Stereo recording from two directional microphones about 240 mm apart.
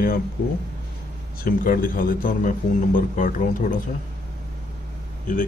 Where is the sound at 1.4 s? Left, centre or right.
Left.